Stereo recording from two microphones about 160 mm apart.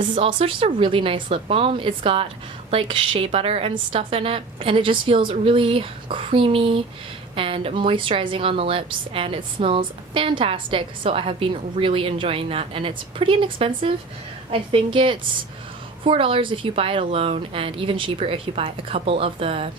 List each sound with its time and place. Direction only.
0.0 s a woman's voice: 35° right (ahead or behind)